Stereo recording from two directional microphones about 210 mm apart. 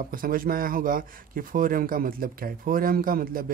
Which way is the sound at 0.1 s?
40° right (ahead or behind).